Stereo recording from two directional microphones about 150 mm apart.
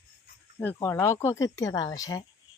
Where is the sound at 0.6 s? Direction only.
15° left (ahead or behind).